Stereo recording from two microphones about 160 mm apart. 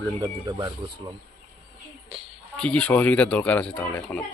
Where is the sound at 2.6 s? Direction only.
5° left (ahead or behind).